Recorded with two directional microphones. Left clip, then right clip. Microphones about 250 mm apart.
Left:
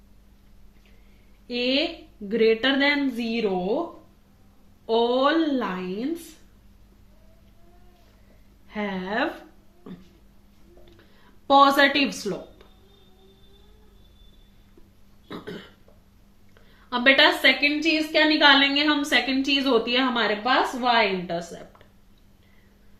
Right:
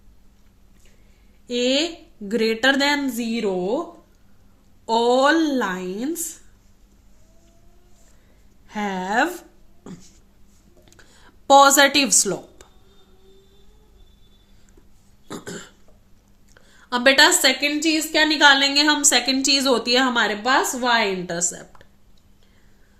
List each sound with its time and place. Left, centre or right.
1.5 s a woman's voice: right
4.9 s a woman's voice: right
8.7 s a woman's voice: right
11.4 s a woman's voice: right
15.3 s burping: right
16.9 s a woman's voice: right